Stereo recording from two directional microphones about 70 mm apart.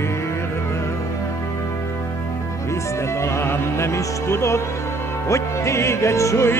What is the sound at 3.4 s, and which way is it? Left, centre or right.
Music, left.